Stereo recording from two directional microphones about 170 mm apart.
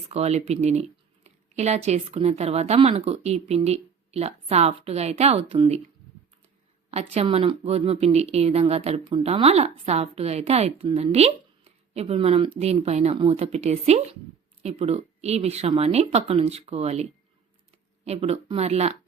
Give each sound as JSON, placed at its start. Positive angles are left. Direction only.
{"t": 0.1, "sound": "speech", "side_deg": -40}
{"t": 6.9, "sound": "speech", "side_deg": -40}